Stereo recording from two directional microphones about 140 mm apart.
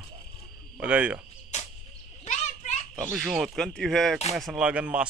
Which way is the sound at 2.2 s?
55° left (ahead or behind).